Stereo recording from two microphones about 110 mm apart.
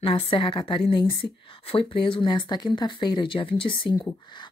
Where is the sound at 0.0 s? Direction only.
55° left (ahead or behind).